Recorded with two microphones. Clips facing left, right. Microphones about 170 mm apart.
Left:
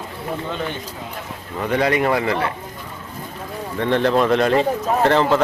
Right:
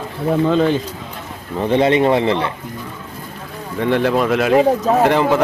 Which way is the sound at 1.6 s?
25° right (ahead or behind).